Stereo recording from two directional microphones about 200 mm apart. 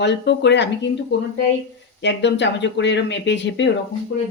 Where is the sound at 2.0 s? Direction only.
60° left (ahead or behind).